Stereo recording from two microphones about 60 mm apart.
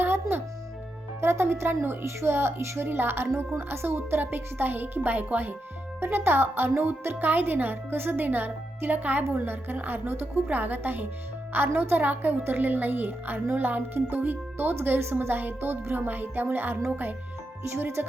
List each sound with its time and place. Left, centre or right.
0.0 s music: right
1.2 s a woman's voice: right